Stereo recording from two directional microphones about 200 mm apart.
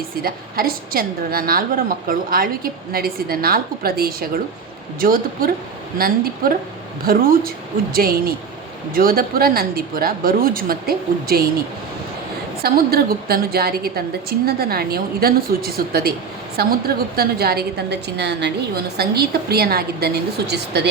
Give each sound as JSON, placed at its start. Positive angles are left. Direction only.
{"t": 0.2, "sound": "a woman's voice", "side_deg": -50}
{"t": 12.6, "sound": "a woman's voice", "side_deg": -50}